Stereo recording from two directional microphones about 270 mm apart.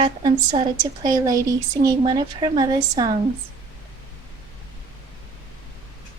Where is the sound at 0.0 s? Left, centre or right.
Centre.